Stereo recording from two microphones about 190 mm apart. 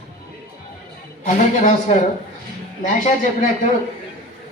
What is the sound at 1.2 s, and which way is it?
A man's voice, 40° left (ahead or behind).